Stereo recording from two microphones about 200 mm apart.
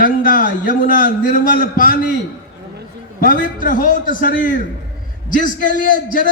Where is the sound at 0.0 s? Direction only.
45° left (ahead or behind).